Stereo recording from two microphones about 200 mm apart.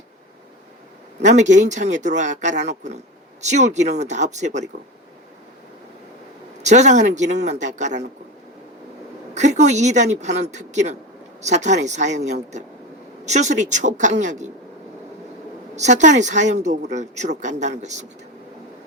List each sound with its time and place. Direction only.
1.2 s speech: 35° right (ahead or behind)
6.6 s speech: 35° right (ahead or behind)
9.3 s speech: 35° right (ahead or behind)
15.7 s speech: 35° right (ahead or behind)